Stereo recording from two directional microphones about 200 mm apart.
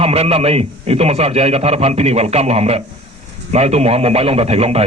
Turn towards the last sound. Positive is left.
turn(degrees=-30)  # may be behind; listen again after turning